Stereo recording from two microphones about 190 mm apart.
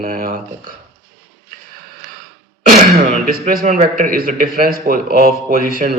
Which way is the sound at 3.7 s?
35° right (ahead or behind).